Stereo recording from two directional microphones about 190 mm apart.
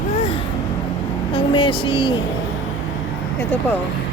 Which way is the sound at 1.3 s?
30° left (ahead or behind).